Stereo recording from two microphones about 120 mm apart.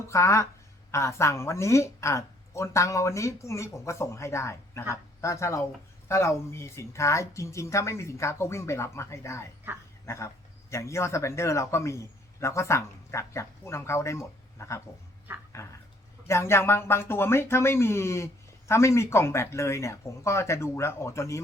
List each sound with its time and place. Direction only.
0.0 s speech: 25° left (ahead or behind)